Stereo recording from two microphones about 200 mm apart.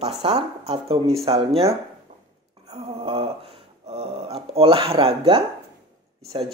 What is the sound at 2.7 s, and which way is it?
Speech, 30° right (ahead or behind).